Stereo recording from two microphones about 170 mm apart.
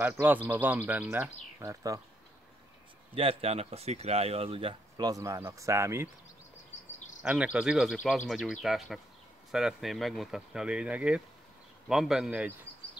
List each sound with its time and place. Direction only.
0.0 s speech: 10° right (ahead or behind)
3.2 s speech: 35° right (ahead or behind); by 6.0 s 15° right (ahead or behind)
7.2 s speech: 5° right (ahead or behind)